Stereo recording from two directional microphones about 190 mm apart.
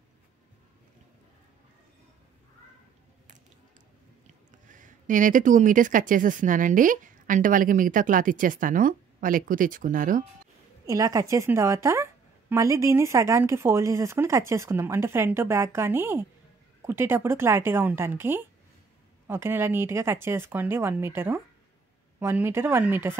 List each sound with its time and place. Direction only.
4.3 s speech: 40° right (ahead or behind)
10.9 s a woman's voice: 20° right (ahead or behind)